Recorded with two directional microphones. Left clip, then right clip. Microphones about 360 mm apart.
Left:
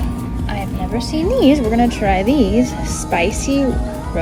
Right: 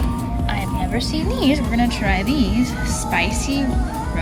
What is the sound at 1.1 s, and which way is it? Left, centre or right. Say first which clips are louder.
Speech: left 8 dB; centre.